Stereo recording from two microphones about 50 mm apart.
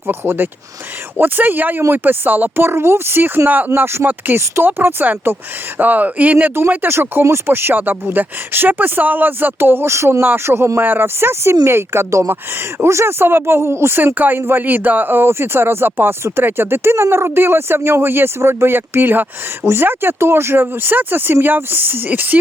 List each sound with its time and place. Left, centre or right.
0.1 s speech: right
1.2 s speech: right
2.6 s speech: right
6.7 s speech: right
9.9 s speech: right
10.2 s speech: right
10.4 s speech: right
12.8 s speech: right
18.3 s speech: right
20.1 s speech: right